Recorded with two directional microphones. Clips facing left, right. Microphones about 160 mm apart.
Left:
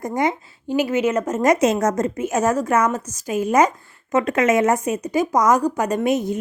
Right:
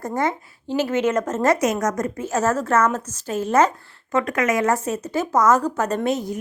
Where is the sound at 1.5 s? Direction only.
30° left (ahead or behind).